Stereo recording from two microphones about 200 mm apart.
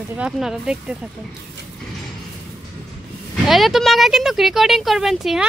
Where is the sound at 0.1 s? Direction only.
5° right (ahead or behind).